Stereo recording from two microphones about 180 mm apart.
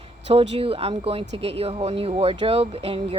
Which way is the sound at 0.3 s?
35° right (ahead or behind).